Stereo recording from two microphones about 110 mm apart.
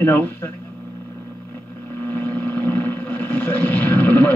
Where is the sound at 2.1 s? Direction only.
15° left (ahead or behind).